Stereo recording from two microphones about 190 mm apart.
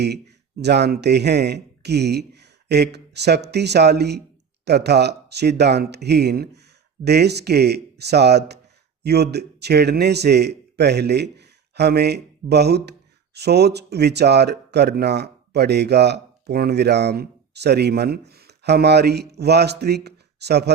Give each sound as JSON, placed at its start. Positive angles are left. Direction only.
{"t": 0.0, "sound": "speech", "side_deg": -60}